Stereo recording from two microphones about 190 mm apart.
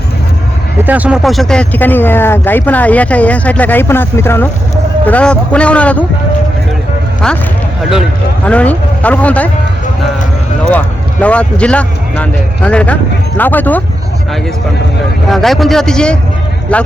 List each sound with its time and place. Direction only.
0.8 s speech: 10° right (ahead or behind); by 6.1 s 5° left (ahead or behind)
8.4 s speech: 5° left (ahead or behind)
10.7 s speech: 5° left (ahead or behind)
15.3 s a man's voice: centre (ahead or behind)